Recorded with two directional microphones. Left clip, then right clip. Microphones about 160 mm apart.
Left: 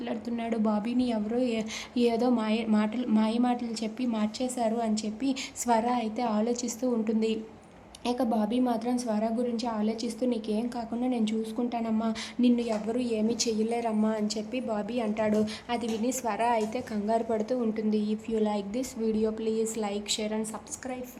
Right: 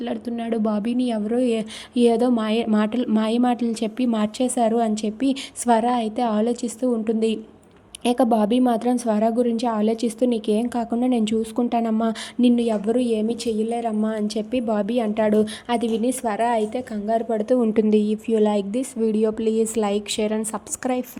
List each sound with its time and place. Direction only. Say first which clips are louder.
0.0 s a woman's voice: right 6 dB; 25° right (ahead or behind)
8.0 s a woman's voice: right 10 dB; 45° right (ahead or behind); by 14.1 s 20° right (ahead or behind)
14.1 s a woman's voice: right 7 dB; 35° right (ahead or behind)
18.0 s a woman's voice: right 9 dB; 35° right (ahead or behind)